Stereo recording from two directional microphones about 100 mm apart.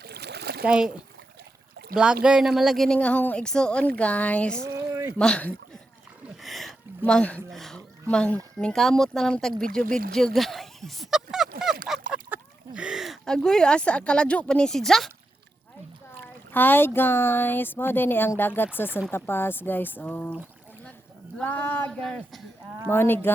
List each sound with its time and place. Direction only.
0.6 s speech: 10° right (ahead or behind)
2.0 s speech: 10° right (ahead or behind)
3.0 s a woman's voice: 15° left (ahead or behind)
4.6 s a sound: 30° right (ahead or behind)
5.1 s a woman's voice: 10° left (ahead or behind)
6.3 s a sound: centre (ahead or behind)
7.0 s a woman's voice: 10° left (ahead or behind)
12.3 s a sound: 10° right (ahead or behind)
13.2 s a woman's voice: 5° left (ahead or behind)
16.5 s speech: 20° left (ahead or behind)
21.4 s a woman's voice: 15° left (ahead or behind)
22.9 s speech: 20° left (ahead or behind)